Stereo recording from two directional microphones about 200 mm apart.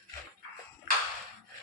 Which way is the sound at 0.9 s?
45° right (ahead or behind).